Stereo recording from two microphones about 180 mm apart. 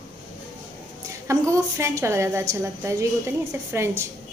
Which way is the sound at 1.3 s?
15° right (ahead or behind).